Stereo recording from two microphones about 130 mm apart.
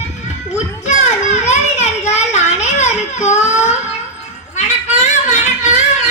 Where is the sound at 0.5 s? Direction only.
60° left (ahead or behind).